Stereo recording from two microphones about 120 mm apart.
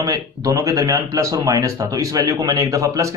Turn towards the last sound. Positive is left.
turn(degrees=-25)  # may be behind; listen again after turning